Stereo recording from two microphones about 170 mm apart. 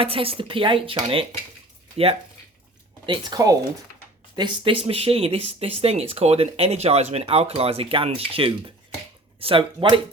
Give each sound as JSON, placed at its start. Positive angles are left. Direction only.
{"t": 0.0, "sound": "speech", "side_deg": -35}
{"t": 3.1, "sound": "speech", "side_deg": -25}